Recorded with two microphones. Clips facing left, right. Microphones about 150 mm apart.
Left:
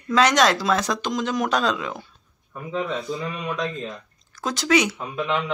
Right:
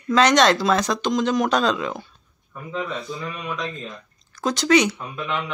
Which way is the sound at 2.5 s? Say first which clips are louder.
Left 2 dB; 20° left (ahead or behind).